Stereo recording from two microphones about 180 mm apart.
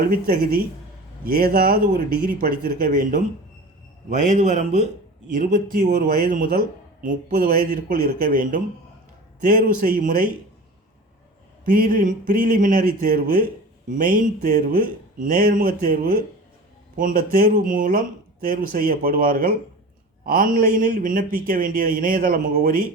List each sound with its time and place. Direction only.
0.1 s a man's voice: 55° right (ahead or behind)
11.8 s a man's voice: 50° right (ahead or behind)